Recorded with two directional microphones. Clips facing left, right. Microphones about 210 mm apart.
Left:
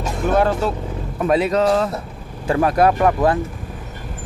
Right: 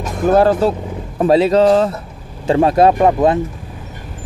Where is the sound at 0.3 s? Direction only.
35° right (ahead or behind).